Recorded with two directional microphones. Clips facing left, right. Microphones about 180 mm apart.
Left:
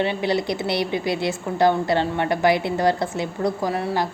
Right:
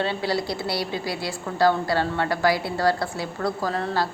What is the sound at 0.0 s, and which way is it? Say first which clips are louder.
A woman's voice: left 3 dB; 20° left (ahead or behind).